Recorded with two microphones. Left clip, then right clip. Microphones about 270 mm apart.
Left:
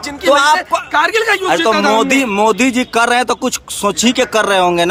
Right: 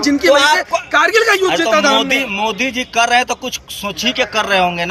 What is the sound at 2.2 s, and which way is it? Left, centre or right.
Speech, left.